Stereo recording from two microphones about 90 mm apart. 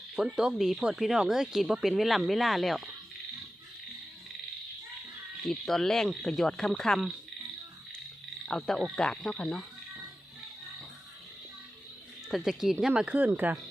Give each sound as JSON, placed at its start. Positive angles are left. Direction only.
{"t": 0.3, "sound": "speech", "side_deg": -5}
{"t": 5.5, "sound": "speech", "side_deg": 5}
{"t": 8.4, "sound": "frog", "side_deg": 5}
{"t": 12.3, "sound": "speech", "side_deg": -5}